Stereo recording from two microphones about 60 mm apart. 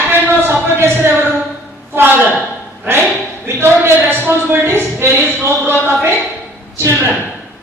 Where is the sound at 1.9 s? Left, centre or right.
Right.